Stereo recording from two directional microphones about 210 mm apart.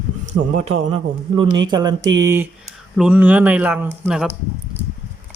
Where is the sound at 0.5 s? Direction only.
30° right (ahead or behind); by 4.3 s 5° right (ahead or behind).